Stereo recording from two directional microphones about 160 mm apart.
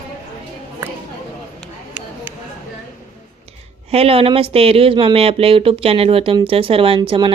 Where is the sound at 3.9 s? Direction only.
35° right (ahead or behind).